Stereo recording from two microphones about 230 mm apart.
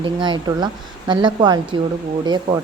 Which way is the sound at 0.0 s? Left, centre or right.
Right.